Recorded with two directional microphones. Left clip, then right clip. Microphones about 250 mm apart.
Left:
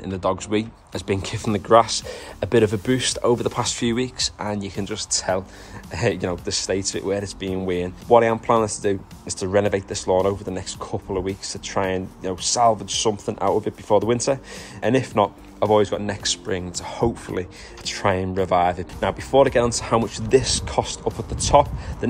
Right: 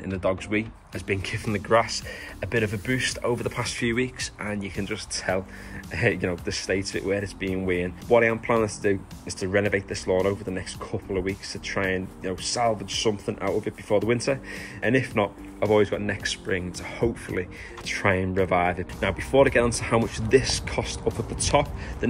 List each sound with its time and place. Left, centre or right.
0.1 s speech: centre